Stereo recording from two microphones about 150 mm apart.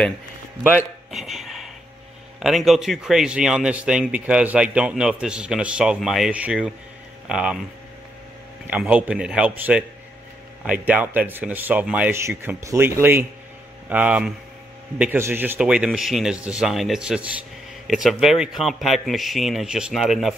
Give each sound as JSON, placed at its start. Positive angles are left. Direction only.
{"t": 1.1, "sound": "a sound", "side_deg": 0}
{"t": 2.4, "sound": "speech", "side_deg": 0}
{"t": 8.6, "sound": "speech", "side_deg": -10}